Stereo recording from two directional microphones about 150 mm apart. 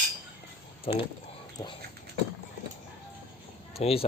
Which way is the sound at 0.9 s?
45° left (ahead or behind).